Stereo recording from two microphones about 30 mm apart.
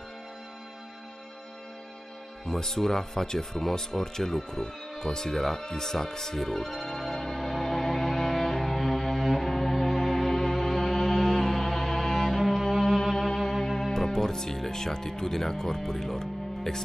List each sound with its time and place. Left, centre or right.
2.6 s speech: centre
5.3 s music: centre
12.4 s music: centre
12.8 s music: centre
13.4 s speech: centre